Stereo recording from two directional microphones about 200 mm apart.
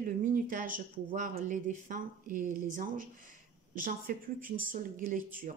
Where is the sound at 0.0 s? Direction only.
40° right (ahead or behind).